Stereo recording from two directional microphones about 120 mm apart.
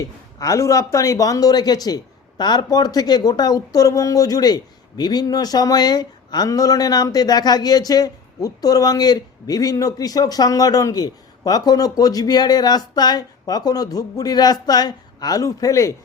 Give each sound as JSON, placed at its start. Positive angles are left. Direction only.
{"t": 0.3, "sound": "speech", "side_deg": 30}